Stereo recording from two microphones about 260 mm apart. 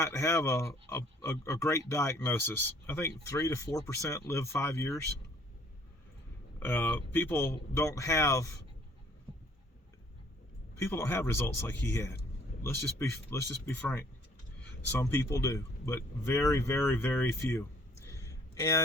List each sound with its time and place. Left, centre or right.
0.0 s speech: centre
6.6 s speech: centre
9.3 s a sound: centre
10.8 s speech: centre